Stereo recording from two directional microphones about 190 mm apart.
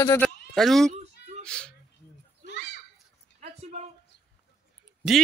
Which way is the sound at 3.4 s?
35° right (ahead or behind).